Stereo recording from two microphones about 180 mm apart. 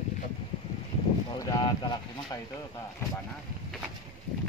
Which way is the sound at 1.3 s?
20° left (ahead or behind).